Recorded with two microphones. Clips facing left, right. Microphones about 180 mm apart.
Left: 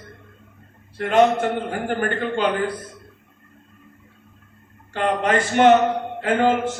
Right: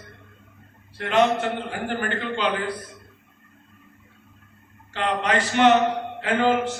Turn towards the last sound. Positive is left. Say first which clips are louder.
# left 2 dB
turn(degrees=50)  # may be behind; listen again after turning